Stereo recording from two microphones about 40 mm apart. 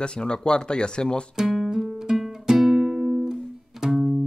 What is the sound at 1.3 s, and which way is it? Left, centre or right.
Music, centre.